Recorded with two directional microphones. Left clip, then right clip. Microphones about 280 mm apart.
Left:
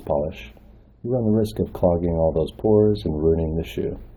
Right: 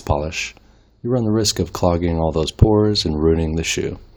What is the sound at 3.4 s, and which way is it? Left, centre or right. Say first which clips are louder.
Speech: right 4 dB; right.